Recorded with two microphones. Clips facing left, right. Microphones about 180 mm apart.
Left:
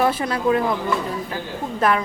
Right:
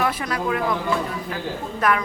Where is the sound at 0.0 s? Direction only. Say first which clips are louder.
Left 4 dB; 30° left (ahead or behind).